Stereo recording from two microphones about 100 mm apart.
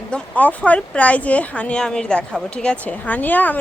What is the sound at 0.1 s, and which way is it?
Speech, 15° left (ahead or behind).